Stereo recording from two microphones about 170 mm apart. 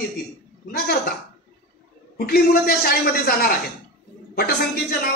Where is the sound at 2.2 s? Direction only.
60° left (ahead or behind).